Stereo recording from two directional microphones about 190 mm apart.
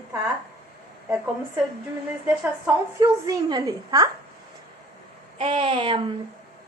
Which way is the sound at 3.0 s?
20° right (ahead or behind).